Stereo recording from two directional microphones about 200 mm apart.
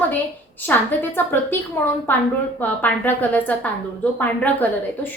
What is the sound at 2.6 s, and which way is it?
A woman's voice, 10° left (ahead or behind).